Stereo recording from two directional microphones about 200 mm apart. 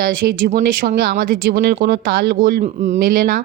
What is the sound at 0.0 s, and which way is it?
Speech, 45° right (ahead or behind).